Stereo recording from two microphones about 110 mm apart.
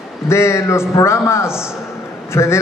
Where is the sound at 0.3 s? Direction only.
25° left (ahead or behind).